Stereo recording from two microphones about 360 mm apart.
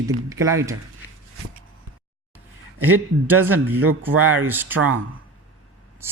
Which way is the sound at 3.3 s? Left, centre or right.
Right.